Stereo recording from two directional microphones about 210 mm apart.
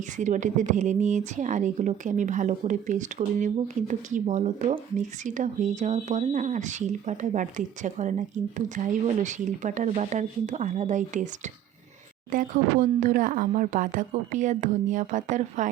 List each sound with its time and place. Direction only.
0.2 s a woman's voice: 35° right (ahead or behind)
12.3 s a woman's voice: 40° right (ahead or behind)